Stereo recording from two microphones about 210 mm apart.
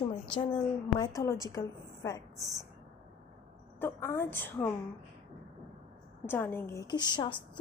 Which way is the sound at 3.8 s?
10° left (ahead or behind).